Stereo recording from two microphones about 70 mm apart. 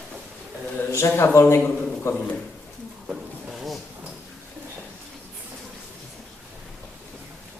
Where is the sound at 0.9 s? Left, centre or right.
Left.